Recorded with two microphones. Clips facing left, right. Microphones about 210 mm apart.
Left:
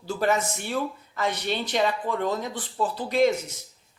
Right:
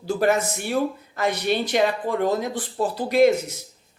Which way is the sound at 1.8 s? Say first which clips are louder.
Right 3 dB; 40° right (ahead or behind).